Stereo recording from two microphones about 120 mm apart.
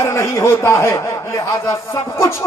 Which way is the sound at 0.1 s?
25° left (ahead or behind).